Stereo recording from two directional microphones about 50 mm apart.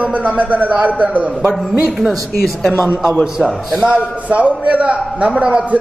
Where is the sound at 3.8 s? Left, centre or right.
Right.